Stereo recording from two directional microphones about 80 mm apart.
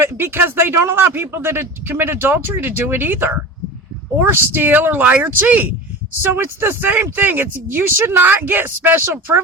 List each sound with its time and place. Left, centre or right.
0.0 s speech: right